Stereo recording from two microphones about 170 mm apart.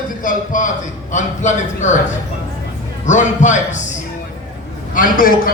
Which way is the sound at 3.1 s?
45° left (ahead or behind).